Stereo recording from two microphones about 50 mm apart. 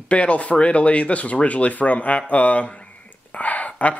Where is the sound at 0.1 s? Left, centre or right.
Left.